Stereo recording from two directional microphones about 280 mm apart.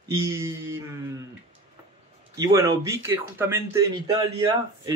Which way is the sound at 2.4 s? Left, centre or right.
Centre.